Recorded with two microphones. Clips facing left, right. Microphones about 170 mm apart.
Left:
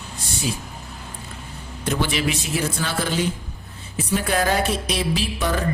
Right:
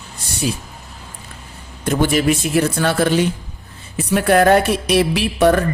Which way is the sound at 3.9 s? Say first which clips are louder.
Right 8 dB; 60° right (ahead or behind).